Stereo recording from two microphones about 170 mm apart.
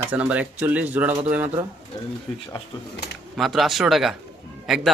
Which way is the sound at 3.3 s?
Centre (ahead or behind).